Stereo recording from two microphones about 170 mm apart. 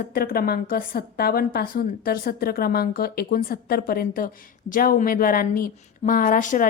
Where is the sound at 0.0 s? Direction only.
60° left (ahead or behind).